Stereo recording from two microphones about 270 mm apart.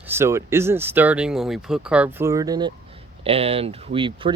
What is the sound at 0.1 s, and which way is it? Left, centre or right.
Speech, centre.